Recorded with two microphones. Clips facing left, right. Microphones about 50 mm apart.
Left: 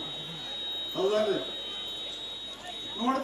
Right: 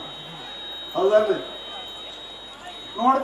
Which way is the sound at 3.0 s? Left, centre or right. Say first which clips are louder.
Right 10 dB; centre.